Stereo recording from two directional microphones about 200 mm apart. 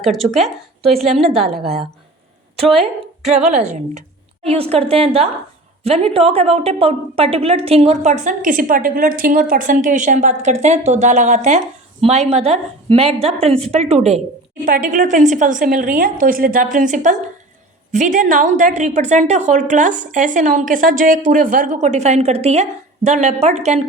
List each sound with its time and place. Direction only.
0.0 s speech: centre (ahead or behind)
3.6 s a woman's voice: 35° right (ahead or behind)
14.6 s a woman's voice: 40° right (ahead or behind)